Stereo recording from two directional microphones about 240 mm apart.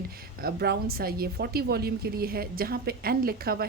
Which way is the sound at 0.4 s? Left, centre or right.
Right.